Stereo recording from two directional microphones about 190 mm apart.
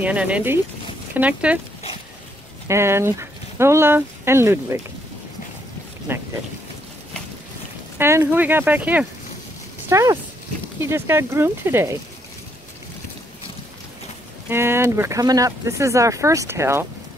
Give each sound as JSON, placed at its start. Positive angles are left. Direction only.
{"t": 0.0, "sound": "speech", "side_deg": -5}
{"t": 2.7, "sound": "speech", "side_deg": -15}
{"t": 6.1, "sound": "speech", "side_deg": -10}
{"t": 8.0, "sound": "speech", "side_deg": -15}
{"t": 14.5, "sound": "speech", "side_deg": -10}